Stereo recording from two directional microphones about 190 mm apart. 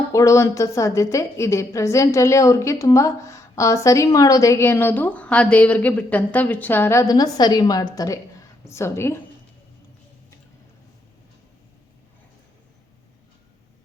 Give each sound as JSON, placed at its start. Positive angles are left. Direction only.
{"t": 0.1, "sound": "a woman's voice", "side_deg": 15}